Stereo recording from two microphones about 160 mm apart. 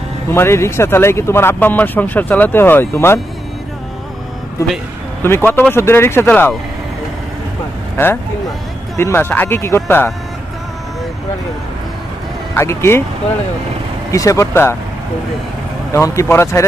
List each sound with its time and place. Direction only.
0.3 s speech: 15° left (ahead or behind)
5.2 s speech: 15° left (ahead or behind)
8.9 s speech: 15° left (ahead or behind)
12.5 s speech: 15° left (ahead or behind)
14.1 s speech: 20° left (ahead or behind)
15.9 s speech: 20° left (ahead or behind)